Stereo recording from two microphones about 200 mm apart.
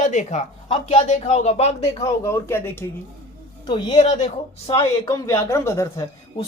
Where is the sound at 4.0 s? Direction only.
35° left (ahead or behind); by 6.0 s 15° left (ahead or behind).